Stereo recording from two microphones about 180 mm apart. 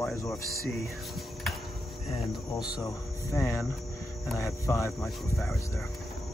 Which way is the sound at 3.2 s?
15° left (ahead or behind).